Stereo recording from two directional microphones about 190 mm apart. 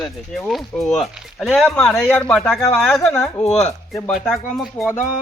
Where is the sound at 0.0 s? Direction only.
Centre (ahead or behind).